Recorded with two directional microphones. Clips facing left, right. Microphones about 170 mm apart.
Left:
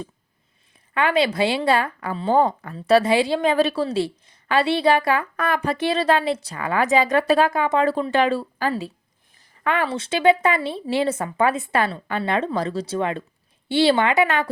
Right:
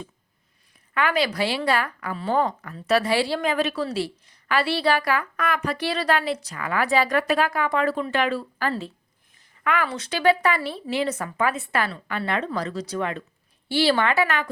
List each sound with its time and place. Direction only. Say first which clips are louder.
0.9 s a woman's voice: left 3 dB; 25° left (ahead or behind)
8.6 s speech: left 2 dB; 15° left (ahead or behind)
9.6 s a woman's voice: left 2 dB; 30° left (ahead or behind)